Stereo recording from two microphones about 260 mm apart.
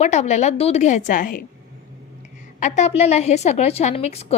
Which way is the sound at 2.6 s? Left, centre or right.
Left.